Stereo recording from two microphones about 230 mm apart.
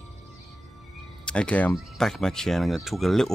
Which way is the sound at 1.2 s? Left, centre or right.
Centre.